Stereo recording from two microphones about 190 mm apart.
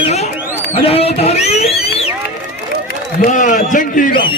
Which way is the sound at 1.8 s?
55° left (ahead or behind).